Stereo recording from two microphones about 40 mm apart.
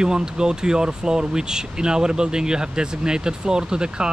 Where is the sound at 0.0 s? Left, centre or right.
Centre.